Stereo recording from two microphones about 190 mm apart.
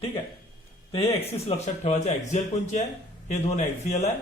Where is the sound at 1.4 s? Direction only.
35° left (ahead or behind).